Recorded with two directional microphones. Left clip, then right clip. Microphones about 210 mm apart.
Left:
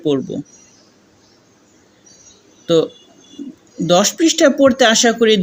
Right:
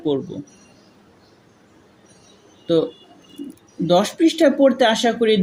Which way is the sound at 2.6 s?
20° left (ahead or behind).